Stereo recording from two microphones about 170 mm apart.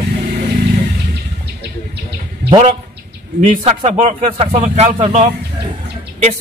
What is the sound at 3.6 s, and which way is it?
Speech, 45° right (ahead or behind).